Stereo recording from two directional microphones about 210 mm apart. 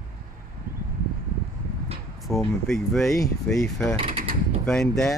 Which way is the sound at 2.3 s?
Centre (ahead or behind).